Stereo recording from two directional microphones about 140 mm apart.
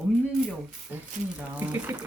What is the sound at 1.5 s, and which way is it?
Speech, 15° right (ahead or behind).